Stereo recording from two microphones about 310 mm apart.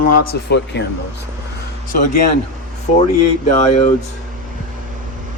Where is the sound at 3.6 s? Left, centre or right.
Left.